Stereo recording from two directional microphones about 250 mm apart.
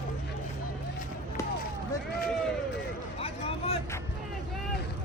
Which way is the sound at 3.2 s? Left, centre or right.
Left.